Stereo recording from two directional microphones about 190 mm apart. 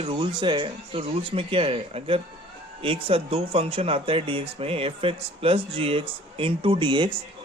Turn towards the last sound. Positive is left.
turn(degrees=-25)  # may be behind; listen again after turning